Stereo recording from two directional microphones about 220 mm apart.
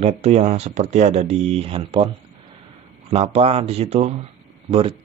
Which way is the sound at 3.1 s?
25° right (ahead or behind).